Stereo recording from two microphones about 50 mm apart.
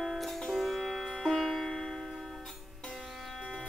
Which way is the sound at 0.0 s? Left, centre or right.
Centre.